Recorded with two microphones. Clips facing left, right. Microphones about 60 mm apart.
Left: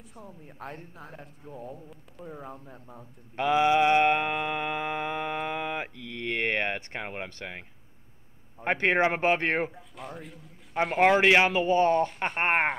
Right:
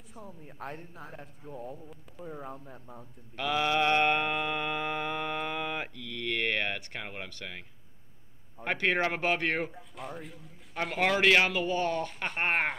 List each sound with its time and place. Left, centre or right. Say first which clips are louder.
0.1 s speech: right 1 dB; centre
3.3 s mantra: left 6 dB; left
6.0 s a sound: left 2 dB; left
8.6 s speech: left 4 dB; left
9.7 s speech: even; centre
11.0 s speech: left 4 dB; left